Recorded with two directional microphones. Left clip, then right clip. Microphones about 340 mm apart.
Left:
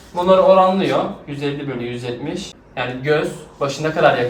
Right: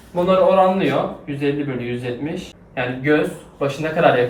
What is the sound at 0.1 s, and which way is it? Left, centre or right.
A man's voice, centre.